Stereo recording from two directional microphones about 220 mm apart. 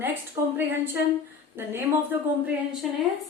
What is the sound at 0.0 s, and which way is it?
A woman's voice, 10° right (ahead or behind).